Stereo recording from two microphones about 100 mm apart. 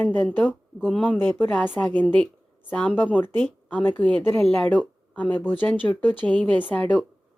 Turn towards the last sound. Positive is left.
turn(degrees=15)  # may be behind; listen again after turning